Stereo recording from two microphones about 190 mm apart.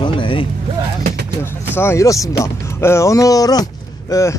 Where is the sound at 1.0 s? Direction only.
50° right (ahead or behind).